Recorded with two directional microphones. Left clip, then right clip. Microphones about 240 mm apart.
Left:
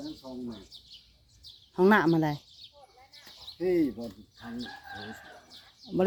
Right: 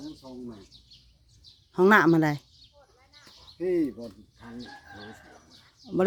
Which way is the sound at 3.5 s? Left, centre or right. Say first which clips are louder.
Even; centre.